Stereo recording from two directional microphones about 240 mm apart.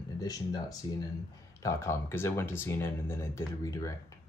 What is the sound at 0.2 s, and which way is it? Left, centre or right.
Speech, centre.